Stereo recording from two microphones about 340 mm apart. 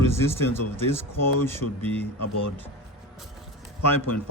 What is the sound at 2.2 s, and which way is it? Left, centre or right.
Speech, left.